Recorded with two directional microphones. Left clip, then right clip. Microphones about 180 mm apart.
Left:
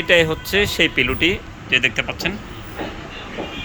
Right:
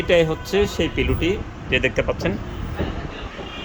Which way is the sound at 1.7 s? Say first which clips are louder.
Left 2 dB; 20° right (ahead or behind).